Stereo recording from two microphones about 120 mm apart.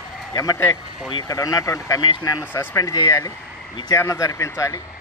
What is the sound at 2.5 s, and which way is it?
Speech, 20° left (ahead or behind).